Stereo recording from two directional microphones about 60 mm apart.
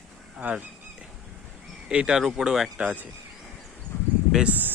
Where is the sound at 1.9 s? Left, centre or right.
Centre.